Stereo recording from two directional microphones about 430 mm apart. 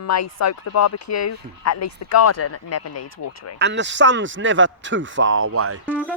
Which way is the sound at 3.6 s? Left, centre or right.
Right.